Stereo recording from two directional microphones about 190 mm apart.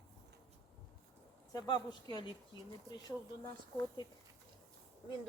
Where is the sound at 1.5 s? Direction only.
20° left (ahead or behind).